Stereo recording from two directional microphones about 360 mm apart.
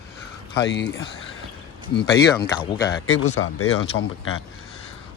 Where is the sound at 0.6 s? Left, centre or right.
Left.